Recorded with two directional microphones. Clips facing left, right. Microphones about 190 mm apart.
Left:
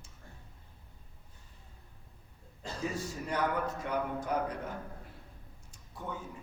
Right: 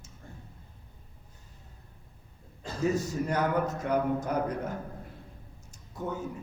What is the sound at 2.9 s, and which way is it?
A man's voice, 40° right (ahead or behind).